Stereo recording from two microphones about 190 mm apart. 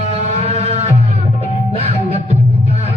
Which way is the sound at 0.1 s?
35° right (ahead or behind).